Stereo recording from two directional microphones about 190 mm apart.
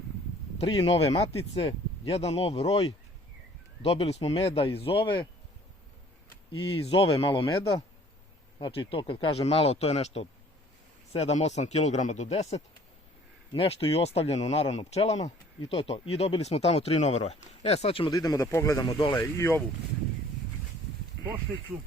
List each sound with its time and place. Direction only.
0.6 s speech: 30° left (ahead or behind)
6.5 s speech: 30° left (ahead or behind); by 19.6 s 15° left (ahead or behind)